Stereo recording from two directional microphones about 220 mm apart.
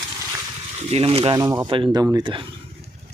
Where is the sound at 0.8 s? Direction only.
25° right (ahead or behind).